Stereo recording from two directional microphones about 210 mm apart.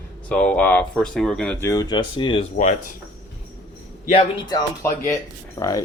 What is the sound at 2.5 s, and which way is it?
Speech, 35° left (ahead or behind).